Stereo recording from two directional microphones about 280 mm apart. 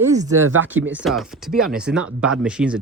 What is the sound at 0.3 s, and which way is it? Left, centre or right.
Speech, right.